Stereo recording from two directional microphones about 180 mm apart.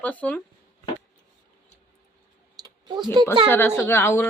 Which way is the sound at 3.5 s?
10° left (ahead or behind).